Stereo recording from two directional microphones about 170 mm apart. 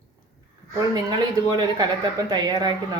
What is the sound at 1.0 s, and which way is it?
Speech, 25° right (ahead or behind).